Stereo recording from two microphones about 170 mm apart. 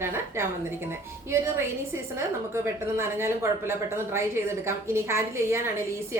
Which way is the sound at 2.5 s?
15° right (ahead or behind).